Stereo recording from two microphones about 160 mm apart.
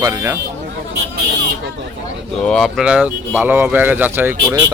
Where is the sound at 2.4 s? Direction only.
Centre (ahead or behind); by 4.6 s 15° right (ahead or behind).